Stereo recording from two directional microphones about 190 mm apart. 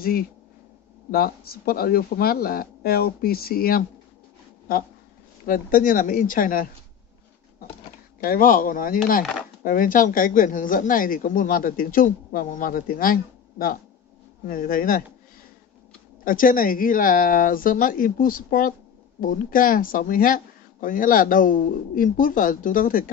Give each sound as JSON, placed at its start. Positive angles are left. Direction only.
{"t": 0.0, "sound": "speech", "side_deg": 50}
{"t": 5.5, "sound": "speech", "side_deg": 45}
{"t": 8.2, "sound": "speech", "side_deg": 50}
{"t": 16.3, "sound": "speech", "side_deg": 45}